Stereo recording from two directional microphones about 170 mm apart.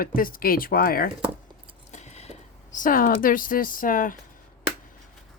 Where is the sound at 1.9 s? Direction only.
40° left (ahead or behind).